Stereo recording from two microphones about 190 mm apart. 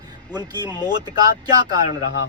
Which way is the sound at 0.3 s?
20° right (ahead or behind).